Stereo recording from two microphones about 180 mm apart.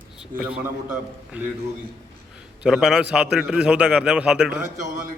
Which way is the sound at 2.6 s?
Centre (ahead or behind).